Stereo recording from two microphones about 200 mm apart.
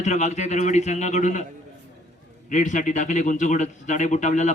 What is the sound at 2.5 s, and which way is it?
A man's voice, 40° left (ahead or behind).